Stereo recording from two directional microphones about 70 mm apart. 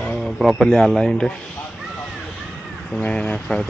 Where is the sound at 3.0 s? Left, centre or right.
Centre.